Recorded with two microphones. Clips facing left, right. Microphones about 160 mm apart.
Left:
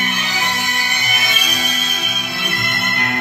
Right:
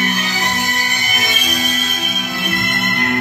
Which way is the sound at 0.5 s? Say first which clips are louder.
Right 2 dB; 45° right (ahead or behind).